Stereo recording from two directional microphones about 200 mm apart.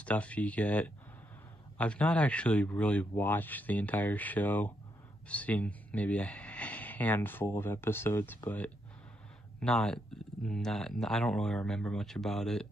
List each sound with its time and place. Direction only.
0.0 s speech: 5° left (ahead or behind)